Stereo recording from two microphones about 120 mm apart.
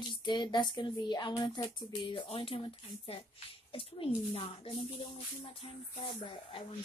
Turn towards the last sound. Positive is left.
turn(degrees=50)  # may be behind; listen again after turning